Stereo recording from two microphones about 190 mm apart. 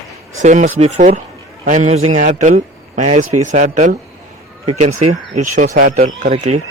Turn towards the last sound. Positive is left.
turn(degrees=-35)  # may be behind; listen again after turning